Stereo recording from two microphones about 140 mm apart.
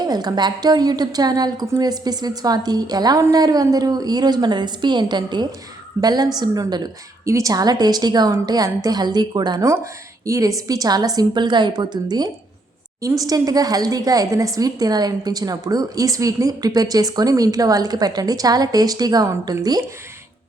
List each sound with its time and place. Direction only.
0.0 s speech: 30° right (ahead or behind)